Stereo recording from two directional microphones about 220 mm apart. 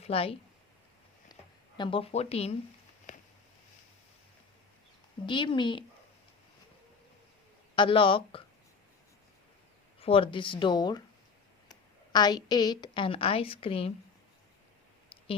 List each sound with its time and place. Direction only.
0.0 s speech: 25° left (ahead or behind)
3.1 s a sound: 35° left (ahead or behind)
5.2 s speech: 20° left (ahead or behind)
7.8 s speech: 25° left (ahead or behind)
10.0 s a woman's voice: 25° left (ahead or behind)